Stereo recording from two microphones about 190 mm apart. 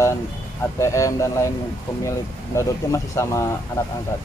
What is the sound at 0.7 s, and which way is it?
Speech, 15° left (ahead or behind).